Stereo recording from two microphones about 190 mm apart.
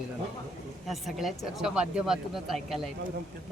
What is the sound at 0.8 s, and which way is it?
Speech, centre (ahead or behind).